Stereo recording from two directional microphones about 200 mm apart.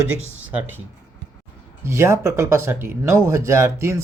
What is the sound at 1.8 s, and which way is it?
Speech, 15° right (ahead or behind).